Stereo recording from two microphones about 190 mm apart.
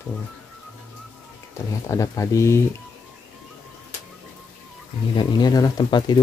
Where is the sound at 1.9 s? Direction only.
15° left (ahead or behind).